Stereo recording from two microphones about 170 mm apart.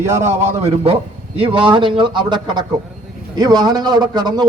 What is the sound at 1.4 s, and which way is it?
A man's voice, 30° right (ahead or behind).